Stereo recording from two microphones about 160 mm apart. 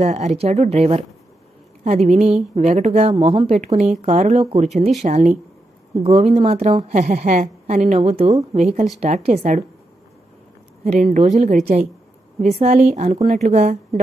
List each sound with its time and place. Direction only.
0.0 s a woman's voice: 40° right (ahead or behind)
10.8 s a woman's voice: 45° right (ahead or behind)